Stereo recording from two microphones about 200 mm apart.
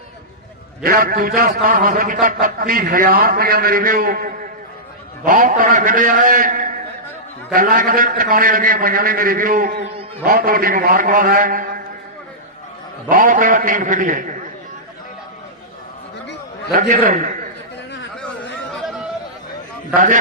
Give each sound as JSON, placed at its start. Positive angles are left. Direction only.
{"t": 0.8, "sound": "a man's voice", "side_deg": -45}
{"t": 13.1, "sound": "a man's voice", "side_deg": -40}
{"t": 16.7, "sound": "a man's voice", "side_deg": -45}
{"t": 18.8, "sound": "a sound", "side_deg": 0}
{"t": 19.9, "sound": "a man's voice", "side_deg": -40}